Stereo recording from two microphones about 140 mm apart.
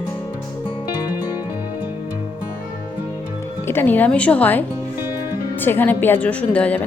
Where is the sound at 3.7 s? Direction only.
15° left (ahead or behind).